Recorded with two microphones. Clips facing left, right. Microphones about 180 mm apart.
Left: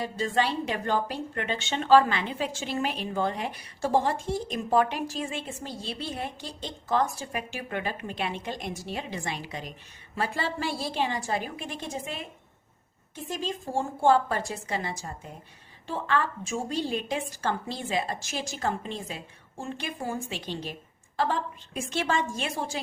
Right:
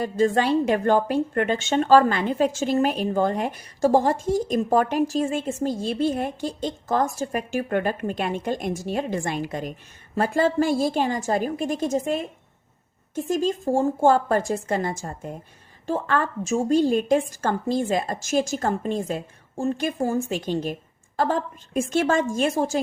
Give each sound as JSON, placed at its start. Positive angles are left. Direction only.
{"t": 0.0, "sound": "a woman's voice", "side_deg": -50}